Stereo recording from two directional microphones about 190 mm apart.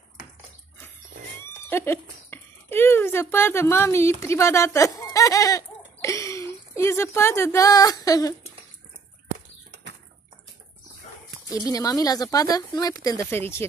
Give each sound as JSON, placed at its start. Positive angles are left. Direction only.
{"t": 1.4, "sound": "speech", "side_deg": 10}
{"t": 11.5, "sound": "speech", "side_deg": 20}